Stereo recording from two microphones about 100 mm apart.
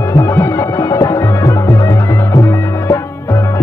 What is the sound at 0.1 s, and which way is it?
Music, 30° left (ahead or behind).